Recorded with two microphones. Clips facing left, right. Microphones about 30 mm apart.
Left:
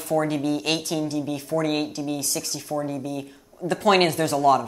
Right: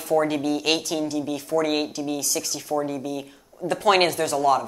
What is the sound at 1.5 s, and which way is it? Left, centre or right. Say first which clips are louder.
A woman's voice: right 2 dB; centre.